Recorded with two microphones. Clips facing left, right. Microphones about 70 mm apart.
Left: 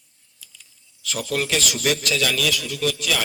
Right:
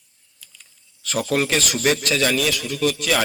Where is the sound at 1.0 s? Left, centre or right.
Right.